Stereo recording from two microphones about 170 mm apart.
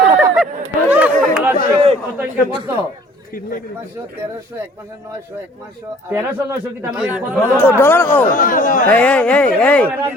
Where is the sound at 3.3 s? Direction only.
55° left (ahead or behind).